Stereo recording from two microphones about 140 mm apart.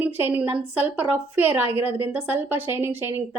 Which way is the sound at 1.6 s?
45° left (ahead or behind).